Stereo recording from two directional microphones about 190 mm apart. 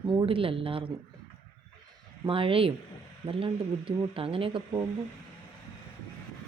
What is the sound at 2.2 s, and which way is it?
Speech, 30° right (ahead or behind).